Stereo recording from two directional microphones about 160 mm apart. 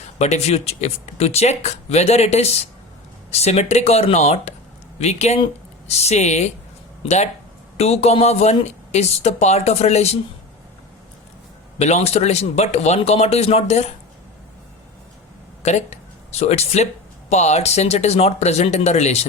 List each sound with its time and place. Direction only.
0.2 s speech: 45° left (ahead or behind)
11.8 s speech: 40° left (ahead or behind)
15.6 s speech: 45° left (ahead or behind)